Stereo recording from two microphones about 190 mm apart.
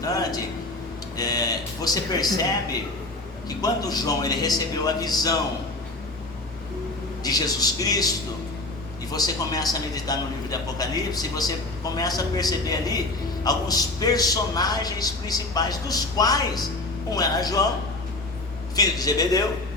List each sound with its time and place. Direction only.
0.0 s a sound: 20° left (ahead or behind)
1.1 s speech: 20° left (ahead or behind)
3.6 s a man's voice: 20° left (ahead or behind)
7.2 s a man's voice: 20° left (ahead or behind)
9.1 s a man's voice: 20° left (ahead or behind)
18.8 s a man's voice: 20° left (ahead or behind)